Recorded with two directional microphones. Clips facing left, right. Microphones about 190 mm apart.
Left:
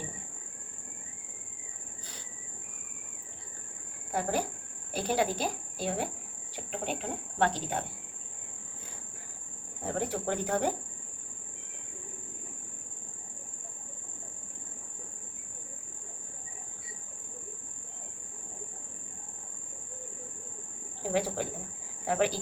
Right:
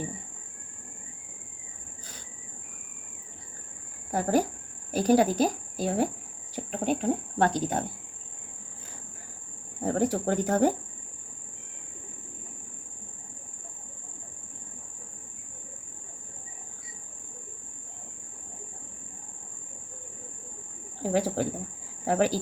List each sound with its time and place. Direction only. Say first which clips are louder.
4.1 s speech: right 6 dB; 40° right (ahead or behind)
9.8 s speech: right 6 dB; 40° right (ahead or behind)
21.1 s speech: right 4 dB; 40° right (ahead or behind)